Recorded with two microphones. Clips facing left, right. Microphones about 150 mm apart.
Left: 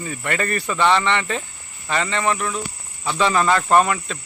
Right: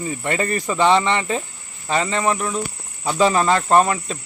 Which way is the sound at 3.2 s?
30° right (ahead or behind).